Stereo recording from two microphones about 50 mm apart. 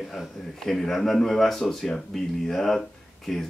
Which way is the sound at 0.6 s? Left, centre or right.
Centre.